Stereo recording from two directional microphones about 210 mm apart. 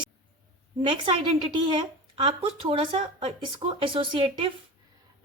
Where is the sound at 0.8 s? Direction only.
25° right (ahead or behind).